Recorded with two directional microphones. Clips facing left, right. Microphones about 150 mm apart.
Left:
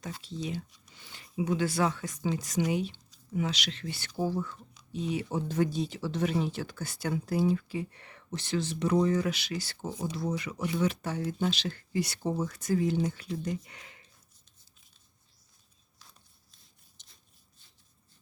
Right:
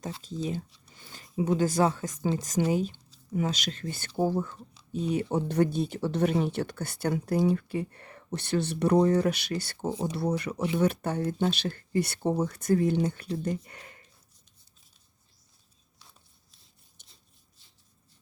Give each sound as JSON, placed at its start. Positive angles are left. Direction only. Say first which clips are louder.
{"t": 1.0, "sound": "speech", "louder": "right 3 dB", "side_deg": -45}
{"t": 5.3, "sound": "speech", "louder": "right 3 dB", "side_deg": -60}